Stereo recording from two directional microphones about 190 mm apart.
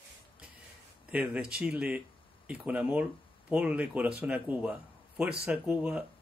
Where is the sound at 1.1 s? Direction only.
5° right (ahead or behind).